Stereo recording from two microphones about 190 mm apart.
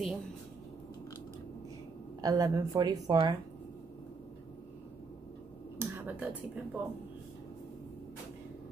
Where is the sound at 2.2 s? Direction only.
20° right (ahead or behind).